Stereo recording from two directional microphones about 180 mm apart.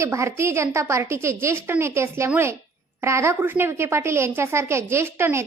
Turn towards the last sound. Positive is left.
turn(degrees=-15)  # may be behind; listen again after turning